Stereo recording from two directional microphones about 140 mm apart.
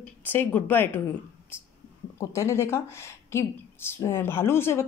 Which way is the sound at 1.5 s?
15° left (ahead or behind).